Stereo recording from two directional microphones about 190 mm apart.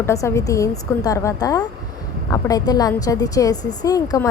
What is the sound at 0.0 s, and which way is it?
A woman's voice, 15° left (ahead or behind).